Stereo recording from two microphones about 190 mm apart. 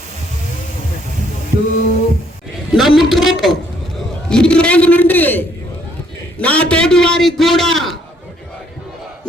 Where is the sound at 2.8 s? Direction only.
Centre (ahead or behind).